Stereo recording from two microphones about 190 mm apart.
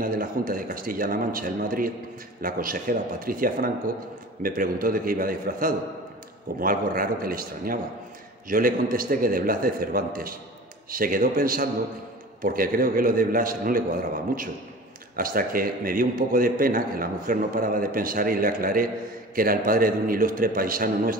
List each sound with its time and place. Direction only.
0.0 s a man's voice: 50° right (ahead or behind)
15.1 s a man's voice: 50° right (ahead or behind)